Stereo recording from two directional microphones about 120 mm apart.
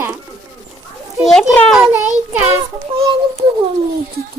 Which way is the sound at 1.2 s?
Centre (ahead or behind).